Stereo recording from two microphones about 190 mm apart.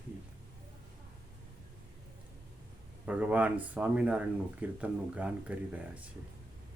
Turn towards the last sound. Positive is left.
turn(degrees=-5)  # may be behind; listen again after turning